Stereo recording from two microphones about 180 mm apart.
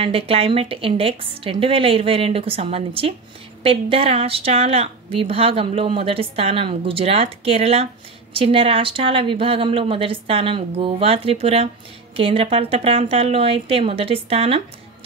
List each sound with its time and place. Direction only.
0.0 s a woman's voice: 30° right (ahead or behind)